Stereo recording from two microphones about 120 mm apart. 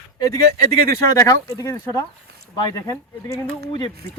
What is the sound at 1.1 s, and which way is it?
Speech, 25° left (ahead or behind).